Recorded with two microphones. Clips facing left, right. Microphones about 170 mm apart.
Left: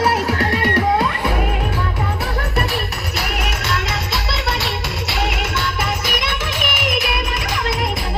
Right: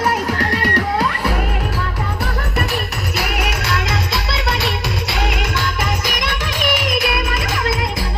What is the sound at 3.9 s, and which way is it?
Music, centre (ahead or behind).